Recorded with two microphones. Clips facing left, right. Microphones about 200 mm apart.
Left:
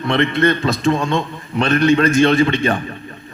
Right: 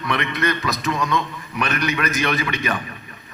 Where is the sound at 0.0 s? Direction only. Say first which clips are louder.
Left 7 dB; 30° left (ahead or behind).